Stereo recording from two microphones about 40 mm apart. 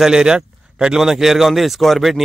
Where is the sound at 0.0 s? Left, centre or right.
Centre.